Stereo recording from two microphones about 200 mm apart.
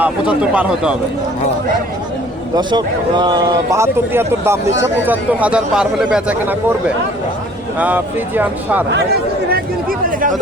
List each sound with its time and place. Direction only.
0.0 s speech: 5° right (ahead or behind)
2.6 s speech: 20° right (ahead or behind)